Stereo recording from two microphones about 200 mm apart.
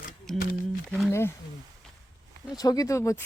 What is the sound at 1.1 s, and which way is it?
Speech, 10° left (ahead or behind).